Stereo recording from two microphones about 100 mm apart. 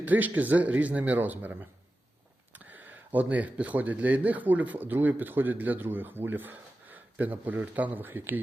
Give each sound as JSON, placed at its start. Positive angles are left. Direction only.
{"t": 0.0, "sound": "speech", "side_deg": -15}